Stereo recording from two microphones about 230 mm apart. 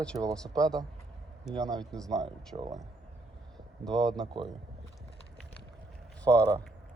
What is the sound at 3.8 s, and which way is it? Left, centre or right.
Speech, centre.